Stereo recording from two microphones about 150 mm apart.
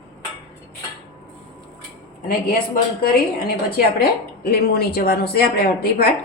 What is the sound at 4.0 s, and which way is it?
A woman's voice, 90° left.